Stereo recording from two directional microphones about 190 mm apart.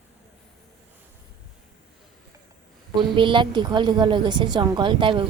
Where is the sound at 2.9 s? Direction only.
25° right (ahead or behind).